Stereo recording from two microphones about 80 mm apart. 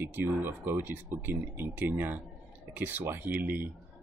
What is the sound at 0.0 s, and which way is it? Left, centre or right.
Speech, right.